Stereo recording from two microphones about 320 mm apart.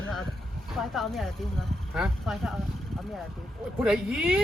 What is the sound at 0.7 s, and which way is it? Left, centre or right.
Speech, centre.